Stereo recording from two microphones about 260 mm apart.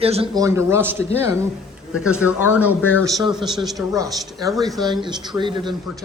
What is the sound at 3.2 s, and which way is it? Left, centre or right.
Speech, centre.